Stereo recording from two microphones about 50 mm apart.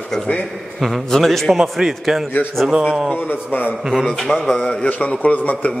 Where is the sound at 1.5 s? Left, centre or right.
Centre.